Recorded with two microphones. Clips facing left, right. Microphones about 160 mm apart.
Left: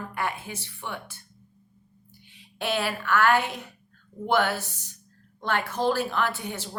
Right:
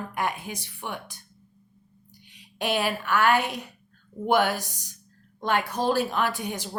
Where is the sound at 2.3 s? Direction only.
15° right (ahead or behind).